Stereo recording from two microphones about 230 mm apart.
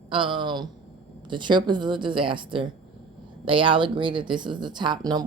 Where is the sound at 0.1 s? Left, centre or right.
Right.